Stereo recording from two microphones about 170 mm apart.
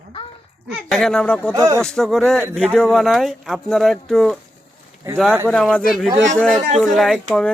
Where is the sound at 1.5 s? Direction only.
20° right (ahead or behind).